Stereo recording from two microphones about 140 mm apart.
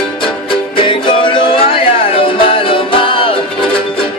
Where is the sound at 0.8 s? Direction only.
35° left (ahead or behind).